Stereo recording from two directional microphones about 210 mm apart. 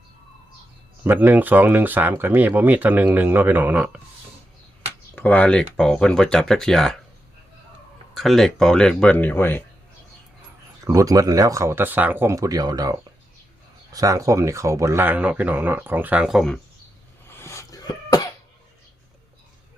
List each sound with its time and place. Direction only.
1.0 s speech: 10° right (ahead or behind)
5.1 s speech: 10° left (ahead or behind)
8.1 s speech: centre (ahead or behind)
10.8 s speech: 15° right (ahead or behind); by 16.6 s centre (ahead or behind)
17.2 s cough: 10° left (ahead or behind)